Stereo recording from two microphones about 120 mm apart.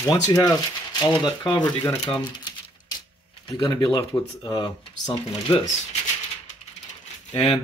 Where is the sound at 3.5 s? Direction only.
30° left (ahead or behind); by 5.6 s 45° left (ahead or behind).